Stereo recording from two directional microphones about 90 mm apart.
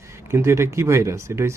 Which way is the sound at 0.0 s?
30° right (ahead or behind).